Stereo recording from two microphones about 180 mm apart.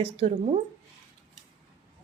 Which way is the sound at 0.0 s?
35° right (ahead or behind).